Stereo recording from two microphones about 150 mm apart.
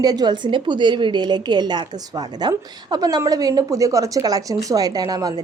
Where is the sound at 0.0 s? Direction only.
25° right (ahead or behind).